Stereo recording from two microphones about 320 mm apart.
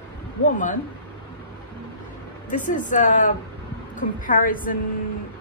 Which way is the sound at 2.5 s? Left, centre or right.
Left.